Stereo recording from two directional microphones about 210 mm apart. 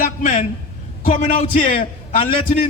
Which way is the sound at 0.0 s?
35° left (ahead or behind).